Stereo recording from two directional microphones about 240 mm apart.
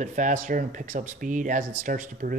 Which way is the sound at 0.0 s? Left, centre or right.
Right.